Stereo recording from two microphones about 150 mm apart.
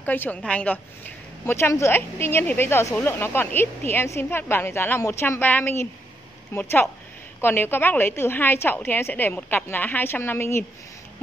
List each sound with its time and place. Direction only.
0.0 s a woman's voice: 10° left (ahead or behind)